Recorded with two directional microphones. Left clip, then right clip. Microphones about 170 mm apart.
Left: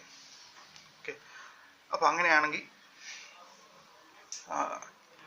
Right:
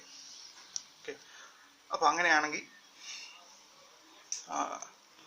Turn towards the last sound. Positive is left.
turn(degrees=-30)  # may be behind; listen again after turning